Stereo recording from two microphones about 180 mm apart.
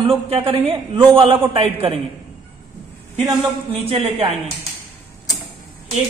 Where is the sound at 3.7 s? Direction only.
30° right (ahead or behind).